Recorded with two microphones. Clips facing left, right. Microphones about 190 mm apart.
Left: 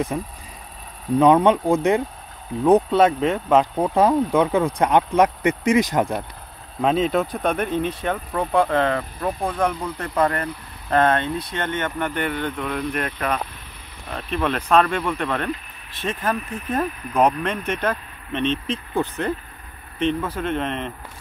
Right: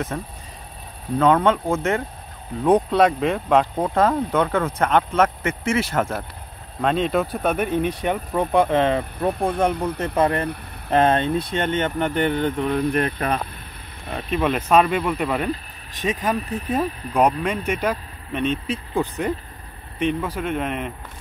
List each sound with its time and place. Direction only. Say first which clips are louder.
0.1 s speech: left 2 dB; 10° left (ahead or behind)
2.6 s speech: left 1 dB; 5° left (ahead or behind)
6.8 s speech: left 1 dB; 5° left (ahead or behind); by 13.4 s 35° right (ahead or behind)
14.3 s speech: right 1 dB; 5° right (ahead or behind)
16.3 s speech: right 2 dB; 35° right (ahead or behind)
17.4 s speech: right 1 dB; 10° right (ahead or behind)